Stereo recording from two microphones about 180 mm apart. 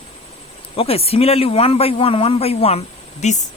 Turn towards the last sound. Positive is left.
turn(degrees=40)  # may be behind; listen again after turning